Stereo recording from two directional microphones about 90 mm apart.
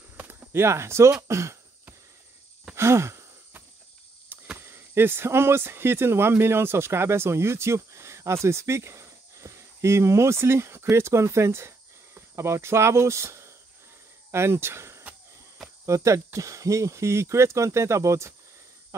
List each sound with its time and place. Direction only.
0.2 s speech: 25° right (ahead or behind)
2.7 s a sound: 30° right (ahead or behind)
4.6 s speech: 25° right (ahead or behind)